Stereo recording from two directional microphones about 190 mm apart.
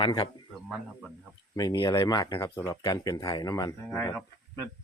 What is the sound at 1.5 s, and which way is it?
Speech, 20° left (ahead or behind).